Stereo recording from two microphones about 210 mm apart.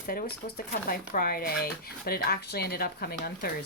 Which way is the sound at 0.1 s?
45° left (ahead or behind).